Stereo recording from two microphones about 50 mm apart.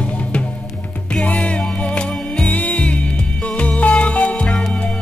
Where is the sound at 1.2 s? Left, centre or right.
Left.